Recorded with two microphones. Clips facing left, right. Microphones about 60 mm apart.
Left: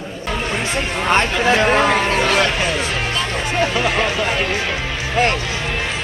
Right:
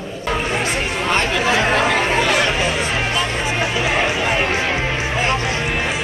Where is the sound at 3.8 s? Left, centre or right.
Centre.